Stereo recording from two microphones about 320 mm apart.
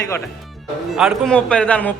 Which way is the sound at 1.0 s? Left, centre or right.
Centre.